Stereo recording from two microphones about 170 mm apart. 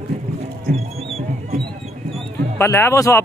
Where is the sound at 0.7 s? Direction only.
35° right (ahead or behind).